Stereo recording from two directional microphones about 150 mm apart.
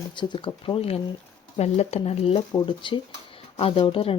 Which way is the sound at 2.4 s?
30° left (ahead or behind).